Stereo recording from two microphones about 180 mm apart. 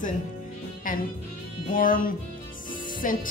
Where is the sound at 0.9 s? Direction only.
50° left (ahead or behind).